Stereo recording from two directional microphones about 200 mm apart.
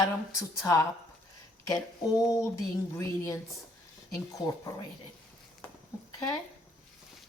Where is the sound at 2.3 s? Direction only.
15° left (ahead or behind).